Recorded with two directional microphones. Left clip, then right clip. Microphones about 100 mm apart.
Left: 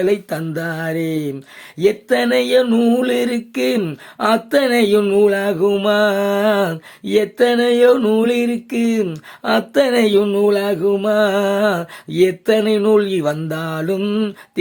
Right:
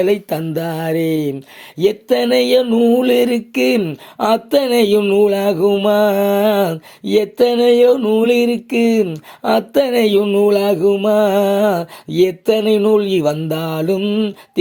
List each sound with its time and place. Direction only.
0.0 s mantra: 20° right (ahead or behind)
1.8 s speech: 20° right (ahead or behind)
2.7 s mantra: 15° right (ahead or behind)
4.2 s speech: 20° right (ahead or behind)
5.2 s mantra: 20° right (ahead or behind)
9.4 s speech: 20° right (ahead or behind)
10.2 s mantra: 10° right (ahead or behind)
10.5 s speech: 20° right (ahead or behind)
10.9 s mantra: 15° right (ahead or behind)
14.0 s mantra: centre (ahead or behind)